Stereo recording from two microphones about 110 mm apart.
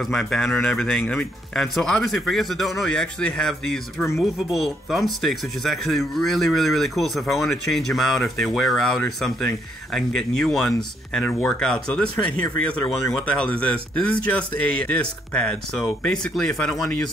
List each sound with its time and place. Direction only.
0.1 s speech: 5° left (ahead or behind)